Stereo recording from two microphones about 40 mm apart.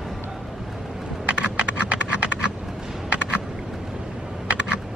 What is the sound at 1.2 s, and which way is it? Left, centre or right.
Computer keyboard, right.